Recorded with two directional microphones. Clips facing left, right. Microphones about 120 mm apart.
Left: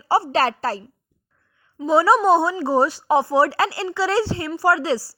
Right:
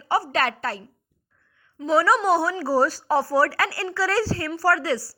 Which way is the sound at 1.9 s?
25° left (ahead or behind).